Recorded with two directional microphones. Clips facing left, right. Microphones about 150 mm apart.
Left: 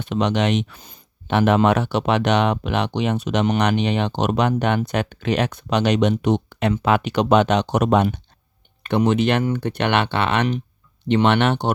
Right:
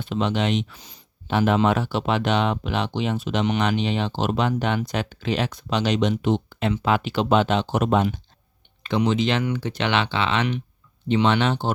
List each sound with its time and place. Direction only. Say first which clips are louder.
0.0 s speech: left 3 dB; 65° left (ahead or behind)